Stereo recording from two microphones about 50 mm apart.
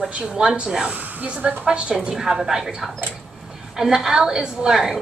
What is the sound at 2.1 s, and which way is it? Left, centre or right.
A woman's voice, centre.